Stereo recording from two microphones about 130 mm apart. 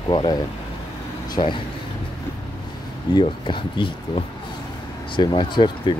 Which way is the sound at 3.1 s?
40° left (ahead or behind).